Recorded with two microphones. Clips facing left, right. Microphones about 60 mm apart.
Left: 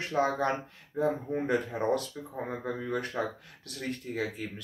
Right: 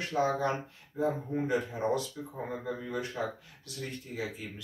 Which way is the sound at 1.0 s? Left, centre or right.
Left.